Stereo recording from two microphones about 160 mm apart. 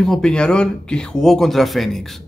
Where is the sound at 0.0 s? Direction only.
5° left (ahead or behind).